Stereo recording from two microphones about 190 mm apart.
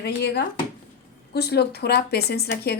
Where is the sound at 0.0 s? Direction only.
60° left (ahead or behind).